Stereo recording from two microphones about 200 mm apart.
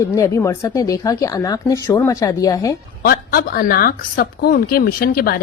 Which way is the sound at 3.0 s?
50° left (ahead or behind).